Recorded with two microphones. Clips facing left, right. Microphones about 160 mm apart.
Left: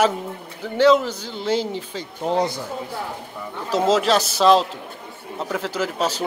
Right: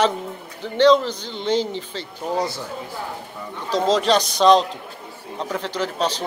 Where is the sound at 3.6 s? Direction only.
5° left (ahead or behind).